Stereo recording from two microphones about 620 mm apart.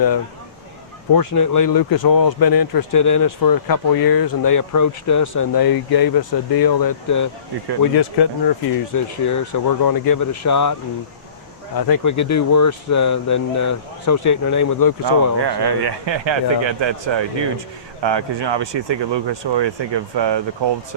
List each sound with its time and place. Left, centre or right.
1.1 s speech: left
11.8 s speech: left
15.4 s speech: right